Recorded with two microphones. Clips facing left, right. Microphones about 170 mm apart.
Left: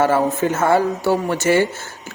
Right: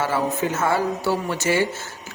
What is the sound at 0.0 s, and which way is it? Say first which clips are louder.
Speech: left 6 dB; 55° left (ahead or behind).